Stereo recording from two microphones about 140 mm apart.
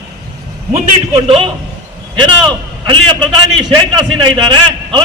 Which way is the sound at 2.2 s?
35° right (ahead or behind).